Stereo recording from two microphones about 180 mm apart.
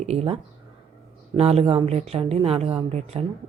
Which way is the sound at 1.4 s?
35° right (ahead or behind).